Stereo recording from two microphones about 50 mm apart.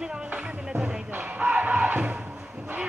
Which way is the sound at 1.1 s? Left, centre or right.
Right.